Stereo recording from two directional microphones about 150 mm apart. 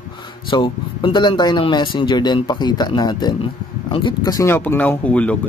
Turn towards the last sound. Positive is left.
turn(degrees=10)  # may be behind; listen again after turning